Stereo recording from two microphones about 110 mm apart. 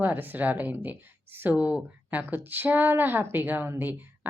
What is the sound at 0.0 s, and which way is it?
A woman's voice, 15° right (ahead or behind).